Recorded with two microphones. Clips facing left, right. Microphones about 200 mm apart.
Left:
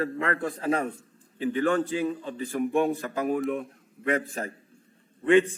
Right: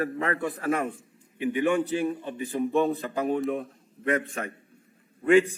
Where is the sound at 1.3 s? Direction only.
15° right (ahead or behind).